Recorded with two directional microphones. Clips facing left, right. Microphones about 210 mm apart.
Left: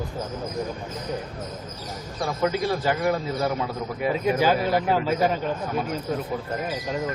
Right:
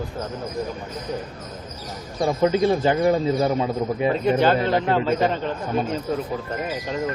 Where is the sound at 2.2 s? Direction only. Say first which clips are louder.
Right 6 dB; 25° right (ahead or behind).